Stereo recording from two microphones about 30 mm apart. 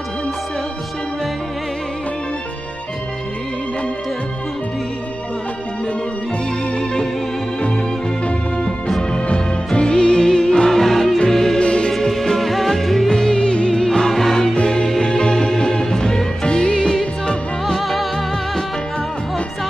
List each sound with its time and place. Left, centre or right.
6.8 s music: centre
9.1 s music: left
10.7 s music: centre
11.6 s music: left
11.9 s music: centre
13.1 s music: left
13.8 s music: centre
14.5 s music: left
14.9 s music: centre
16.4 s music: left
17.7 s music: centre